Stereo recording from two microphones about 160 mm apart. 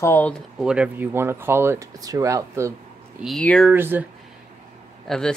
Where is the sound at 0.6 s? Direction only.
5° right (ahead or behind).